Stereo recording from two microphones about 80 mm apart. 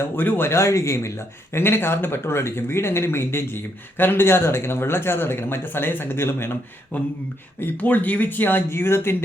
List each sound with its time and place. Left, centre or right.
0.0 s speech: left